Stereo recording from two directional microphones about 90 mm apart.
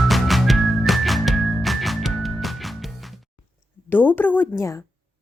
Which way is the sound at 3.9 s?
20° left (ahead or behind).